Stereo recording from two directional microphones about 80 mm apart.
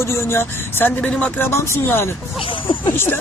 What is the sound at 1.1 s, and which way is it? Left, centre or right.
Speech, centre.